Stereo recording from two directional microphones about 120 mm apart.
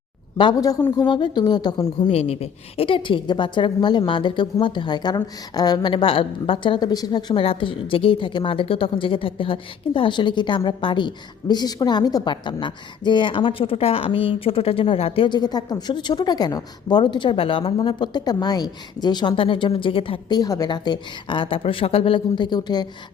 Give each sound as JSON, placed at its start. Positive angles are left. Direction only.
{"t": 0.3, "sound": "a woman's voice", "side_deg": 35}
{"t": 2.0, "sound": "a woman's voice", "side_deg": 60}
{"t": 7.4, "sound": "a woman's voice", "side_deg": 50}